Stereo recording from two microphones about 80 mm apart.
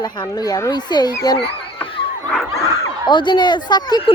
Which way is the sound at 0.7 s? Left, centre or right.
Left.